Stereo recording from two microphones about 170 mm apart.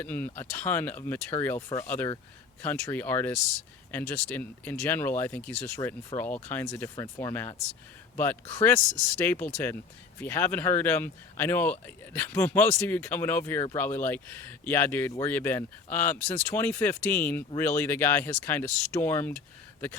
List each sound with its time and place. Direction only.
0.0 s speech: 10° left (ahead or behind)